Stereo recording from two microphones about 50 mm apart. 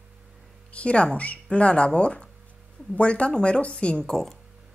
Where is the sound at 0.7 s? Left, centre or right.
Left.